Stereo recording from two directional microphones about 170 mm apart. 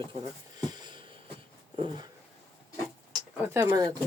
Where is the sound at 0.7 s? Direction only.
25° right (ahead or behind).